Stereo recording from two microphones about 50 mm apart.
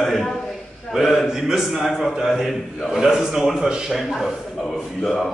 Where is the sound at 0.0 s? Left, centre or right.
Centre.